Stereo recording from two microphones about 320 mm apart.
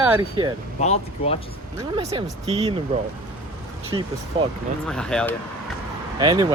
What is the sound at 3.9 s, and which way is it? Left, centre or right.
Speech, centre.